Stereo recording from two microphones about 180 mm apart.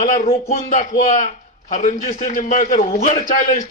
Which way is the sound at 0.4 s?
45° left (ahead or behind).